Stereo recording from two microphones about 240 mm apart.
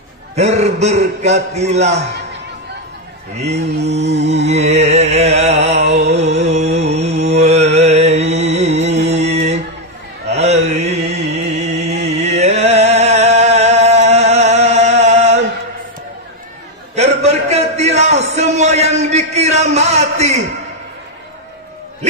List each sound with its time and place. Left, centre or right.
0.4 s a man's voice: right
3.3 s a man's voice: right
3.8 s music: right
10.3 s mantra: right
16.9 s a sound: right